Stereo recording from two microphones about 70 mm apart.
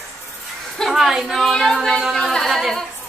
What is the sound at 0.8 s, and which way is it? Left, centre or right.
Speech, centre.